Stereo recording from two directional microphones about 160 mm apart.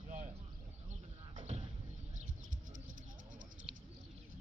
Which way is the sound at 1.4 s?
45° right (ahead or behind).